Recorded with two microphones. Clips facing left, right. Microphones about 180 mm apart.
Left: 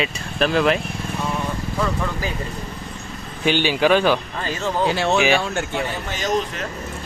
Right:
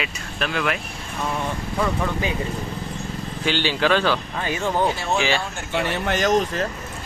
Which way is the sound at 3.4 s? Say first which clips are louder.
Left 4 dB; 15° left (ahead or behind).